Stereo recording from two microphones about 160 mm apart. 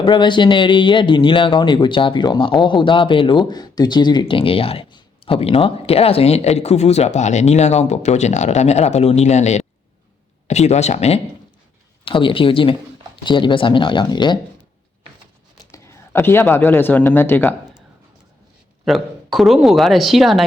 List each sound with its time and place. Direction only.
0.0 s speech: 30° left (ahead or behind)
12.0 s speech: 30° left (ahead or behind)
15.7 s speech: 15° left (ahead or behind)
18.9 s speech: centre (ahead or behind)